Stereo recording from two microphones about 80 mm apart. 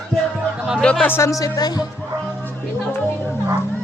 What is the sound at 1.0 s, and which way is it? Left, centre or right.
Speech, left.